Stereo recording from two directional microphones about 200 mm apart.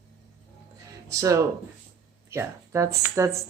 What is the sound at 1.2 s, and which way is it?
Speech, 15° right (ahead or behind).